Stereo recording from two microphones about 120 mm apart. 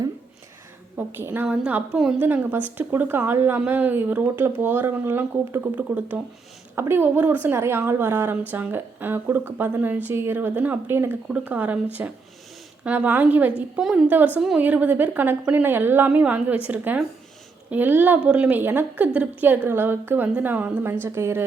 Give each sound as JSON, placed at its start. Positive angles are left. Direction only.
{"t": 0.9, "sound": "a woman's voice", "side_deg": -15}